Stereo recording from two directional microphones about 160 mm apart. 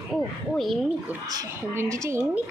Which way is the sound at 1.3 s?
20° right (ahead or behind).